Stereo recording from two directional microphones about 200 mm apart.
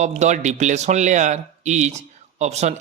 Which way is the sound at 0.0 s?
35° right (ahead or behind).